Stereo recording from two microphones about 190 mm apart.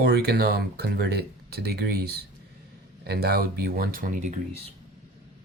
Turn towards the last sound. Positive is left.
turn(degrees=-40)  # may be behind; listen again after turning